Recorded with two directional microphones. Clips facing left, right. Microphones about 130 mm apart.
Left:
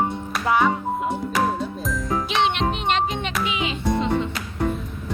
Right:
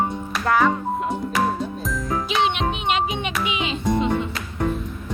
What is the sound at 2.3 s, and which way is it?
Music, centre (ahead or behind).